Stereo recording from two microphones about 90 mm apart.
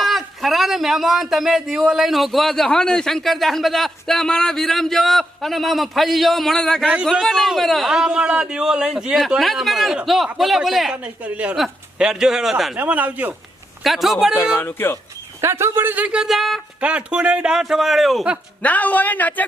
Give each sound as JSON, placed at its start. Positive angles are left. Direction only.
{"t": 0.0, "sound": "speech", "side_deg": 0}
{"t": 6.8, "sound": "speech", "side_deg": -10}
{"t": 7.1, "sound": "speech", "side_deg": 0}
{"t": 10.9, "sound": "speech", "side_deg": -15}
{"t": 11.5, "sound": "speech", "side_deg": -5}
{"t": 12.7, "sound": "speech", "side_deg": -20}
{"t": 13.8, "sound": "speech", "side_deg": 0}
{"t": 14.5, "sound": "a man's voice", "side_deg": 25}
{"t": 15.4, "sound": "a man's voice", "side_deg": -30}
{"t": 16.8, "sound": "speech", "side_deg": -15}
{"t": 18.6, "sound": "a man's voice", "side_deg": 15}